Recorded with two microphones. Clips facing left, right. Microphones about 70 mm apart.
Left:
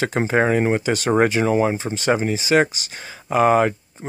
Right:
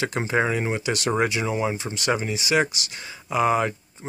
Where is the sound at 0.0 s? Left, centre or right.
Left.